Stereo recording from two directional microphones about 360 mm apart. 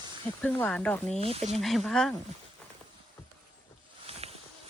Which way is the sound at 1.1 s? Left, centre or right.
Centre.